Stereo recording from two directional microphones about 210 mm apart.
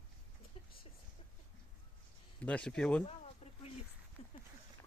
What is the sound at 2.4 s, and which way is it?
Speech, 5° left (ahead or behind).